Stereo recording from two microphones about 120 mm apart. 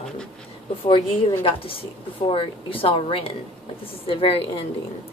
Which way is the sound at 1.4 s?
50° left (ahead or behind).